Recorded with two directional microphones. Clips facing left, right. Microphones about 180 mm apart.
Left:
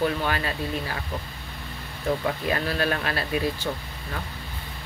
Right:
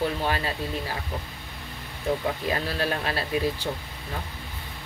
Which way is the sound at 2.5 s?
30° right (ahead or behind).